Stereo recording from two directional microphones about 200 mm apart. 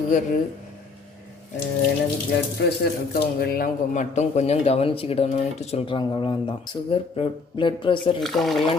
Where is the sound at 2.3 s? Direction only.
55° left (ahead or behind); by 8.1 s 25° left (ahead or behind).